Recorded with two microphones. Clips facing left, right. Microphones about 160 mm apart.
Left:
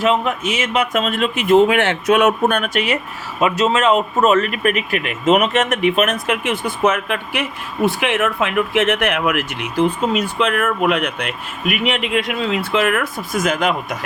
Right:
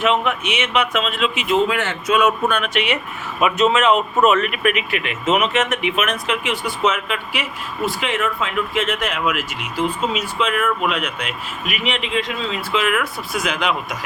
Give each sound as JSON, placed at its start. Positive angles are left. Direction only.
{"t": 0.0, "sound": "speech", "side_deg": 35}